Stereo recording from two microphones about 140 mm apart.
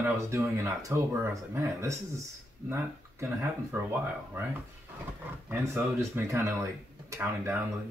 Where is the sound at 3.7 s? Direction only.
15° right (ahead or behind).